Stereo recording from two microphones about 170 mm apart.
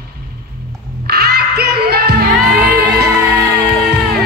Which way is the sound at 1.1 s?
70° right (ahead or behind).